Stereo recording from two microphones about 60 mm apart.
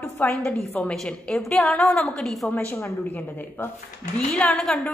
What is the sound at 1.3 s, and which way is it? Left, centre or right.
A woman's voice, centre.